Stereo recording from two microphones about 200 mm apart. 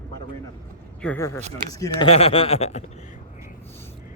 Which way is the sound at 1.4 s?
30° right (ahead or behind).